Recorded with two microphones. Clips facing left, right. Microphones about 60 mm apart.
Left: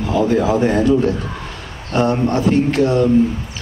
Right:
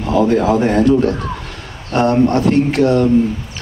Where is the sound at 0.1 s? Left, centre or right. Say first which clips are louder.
Right 3 dB; right.